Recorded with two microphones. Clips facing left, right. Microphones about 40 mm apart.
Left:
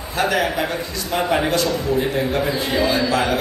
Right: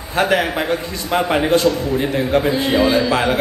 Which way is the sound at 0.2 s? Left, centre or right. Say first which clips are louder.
Right 3 dB; right.